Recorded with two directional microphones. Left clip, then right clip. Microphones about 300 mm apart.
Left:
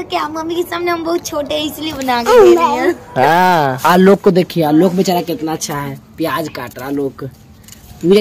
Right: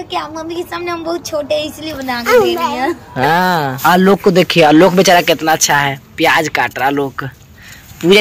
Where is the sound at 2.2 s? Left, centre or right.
Left.